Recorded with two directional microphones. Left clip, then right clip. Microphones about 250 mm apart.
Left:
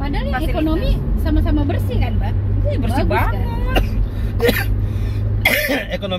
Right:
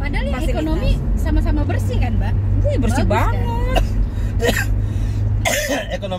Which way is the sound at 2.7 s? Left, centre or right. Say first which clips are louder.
Even; right.